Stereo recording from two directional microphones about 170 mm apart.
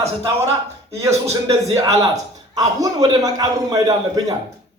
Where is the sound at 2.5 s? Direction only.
20° right (ahead or behind).